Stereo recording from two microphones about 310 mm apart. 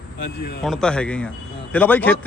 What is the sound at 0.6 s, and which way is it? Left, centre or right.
Speech, centre.